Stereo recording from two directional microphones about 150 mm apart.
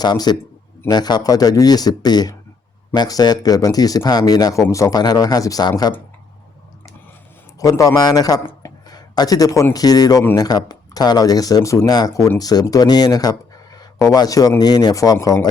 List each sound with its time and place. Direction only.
0.0 s speech: 25° left (ahead or behind)
7.6 s speech: 20° left (ahead or behind)